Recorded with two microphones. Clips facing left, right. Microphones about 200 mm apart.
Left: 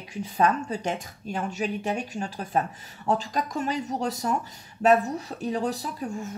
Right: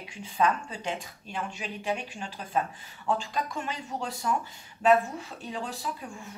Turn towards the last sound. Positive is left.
turn(degrees=40)  # may be behind; listen again after turning